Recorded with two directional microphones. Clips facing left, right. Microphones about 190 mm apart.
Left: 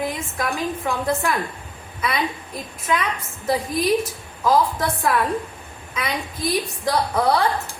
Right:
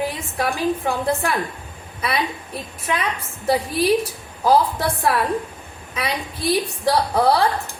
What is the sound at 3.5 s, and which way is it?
A woman's voice, 30° right (ahead or behind).